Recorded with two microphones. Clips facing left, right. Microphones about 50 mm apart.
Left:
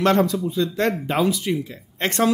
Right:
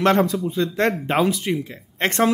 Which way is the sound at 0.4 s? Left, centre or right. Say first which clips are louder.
Right 1 dB; right.